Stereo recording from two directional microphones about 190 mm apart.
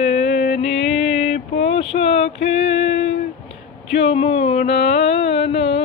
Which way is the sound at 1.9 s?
35° left (ahead or behind).